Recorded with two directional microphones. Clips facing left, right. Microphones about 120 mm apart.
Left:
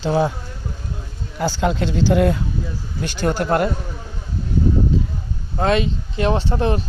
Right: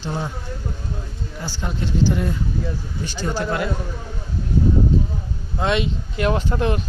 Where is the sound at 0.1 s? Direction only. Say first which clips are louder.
Left 9 dB; 90° left.